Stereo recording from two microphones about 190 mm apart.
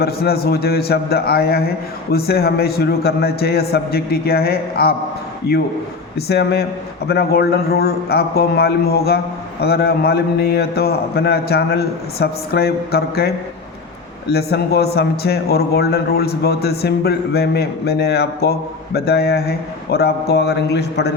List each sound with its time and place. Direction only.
0.0 s a man's voice: 55° left (ahead or behind)
6.1 s a man's voice: 60° left (ahead or behind)